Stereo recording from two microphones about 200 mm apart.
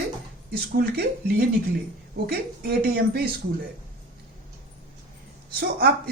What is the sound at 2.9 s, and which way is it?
Speech, 50° right (ahead or behind).